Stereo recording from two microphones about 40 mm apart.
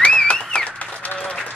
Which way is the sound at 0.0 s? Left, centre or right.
Left.